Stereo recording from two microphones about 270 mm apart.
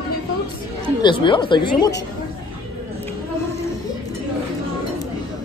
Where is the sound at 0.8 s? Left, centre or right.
Centre.